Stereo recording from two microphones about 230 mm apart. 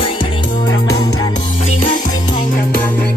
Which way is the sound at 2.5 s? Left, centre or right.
Left.